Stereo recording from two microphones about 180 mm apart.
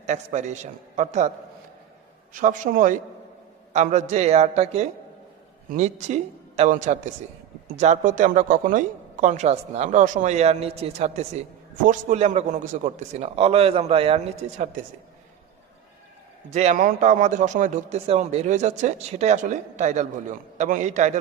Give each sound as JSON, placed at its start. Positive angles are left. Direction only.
{"t": 0.0, "sound": "speech", "side_deg": -40}
{"t": 2.3, "sound": "speech", "side_deg": -45}
{"t": 3.7, "sound": "speech", "side_deg": -40}
{"t": 16.5, "sound": "speech", "side_deg": -40}